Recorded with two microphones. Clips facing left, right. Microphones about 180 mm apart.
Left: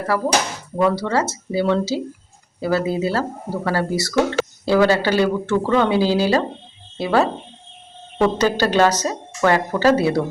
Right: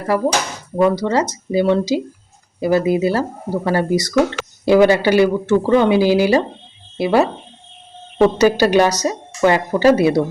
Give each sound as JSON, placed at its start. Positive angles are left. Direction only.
{"t": 0.1, "sound": "speech", "side_deg": -15}